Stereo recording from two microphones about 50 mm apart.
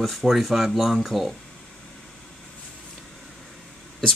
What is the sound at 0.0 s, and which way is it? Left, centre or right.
Speech, centre.